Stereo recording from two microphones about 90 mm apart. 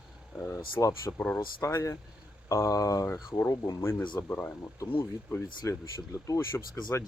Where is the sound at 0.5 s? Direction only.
35° left (ahead or behind).